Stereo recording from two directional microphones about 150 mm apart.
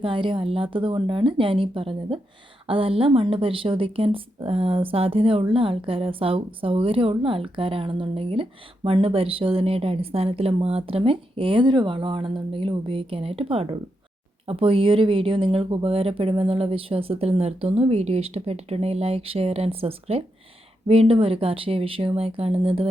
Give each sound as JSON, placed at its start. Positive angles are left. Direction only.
{"t": 0.0, "sound": "a woman's voice", "side_deg": -35}